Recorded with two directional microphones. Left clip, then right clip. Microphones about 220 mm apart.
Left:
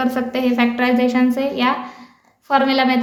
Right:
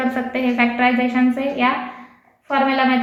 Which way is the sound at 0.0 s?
50° left (ahead or behind).